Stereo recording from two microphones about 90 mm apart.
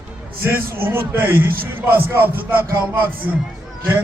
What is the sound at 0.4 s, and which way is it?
A man's voice, 25° right (ahead or behind).